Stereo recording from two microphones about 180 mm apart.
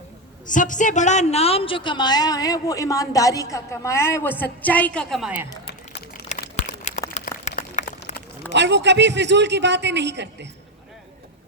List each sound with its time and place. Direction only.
0.4 s a woman's voice: 45° left (ahead or behind); by 5.3 s 5° left (ahead or behind)
6.6 s a sound: 40° left (ahead or behind)
8.5 s a man's voice: 75° right (ahead or behind)